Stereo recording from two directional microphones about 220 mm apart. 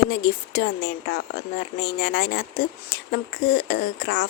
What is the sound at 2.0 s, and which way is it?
Speech, 45° left (ahead or behind).